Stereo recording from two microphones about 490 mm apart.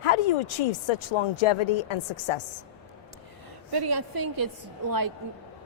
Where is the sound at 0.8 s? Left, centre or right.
Left.